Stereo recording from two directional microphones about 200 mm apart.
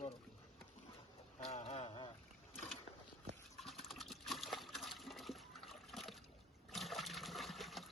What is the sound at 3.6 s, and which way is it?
Water, centre (ahead or behind).